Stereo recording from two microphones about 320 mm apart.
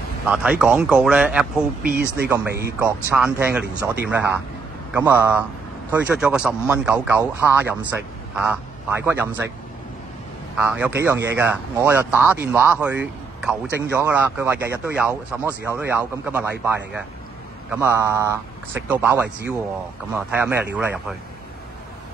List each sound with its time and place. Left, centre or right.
0.3 s speech: centre
1.8 s speech: right
2.1 s speech: centre
9.0 s speech: centre
10.6 s a man's voice: centre